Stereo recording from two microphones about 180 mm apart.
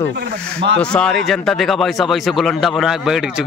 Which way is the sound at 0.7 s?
5° left (ahead or behind).